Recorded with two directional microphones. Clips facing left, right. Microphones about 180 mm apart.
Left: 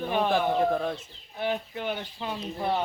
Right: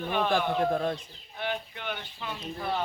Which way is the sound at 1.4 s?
35° left (ahead or behind).